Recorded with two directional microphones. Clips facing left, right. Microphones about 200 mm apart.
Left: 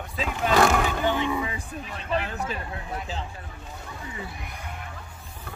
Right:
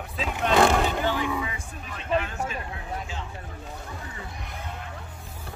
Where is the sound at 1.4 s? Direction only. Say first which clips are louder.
Left 3 dB; 30° left (ahead or behind).